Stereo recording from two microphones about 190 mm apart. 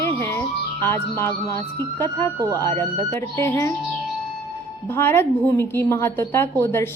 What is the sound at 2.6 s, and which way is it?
A woman's voice, 15° left (ahead or behind).